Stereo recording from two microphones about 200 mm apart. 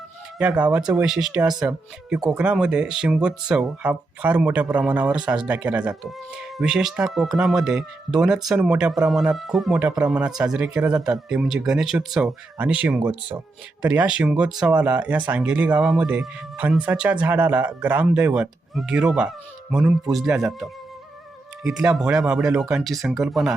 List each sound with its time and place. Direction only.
0.3 s speech: 5° right (ahead or behind)
0.8 s speech: 20° right (ahead or behind)
1.0 s speech: centre (ahead or behind)